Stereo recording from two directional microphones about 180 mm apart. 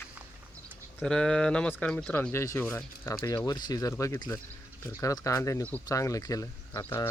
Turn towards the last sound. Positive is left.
turn(degrees=15)  # may be behind; listen again after turning